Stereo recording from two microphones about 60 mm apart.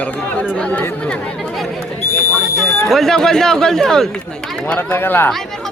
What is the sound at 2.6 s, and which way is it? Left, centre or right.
Speech, centre.